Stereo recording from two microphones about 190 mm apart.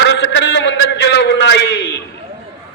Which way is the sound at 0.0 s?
65° left (ahead or behind).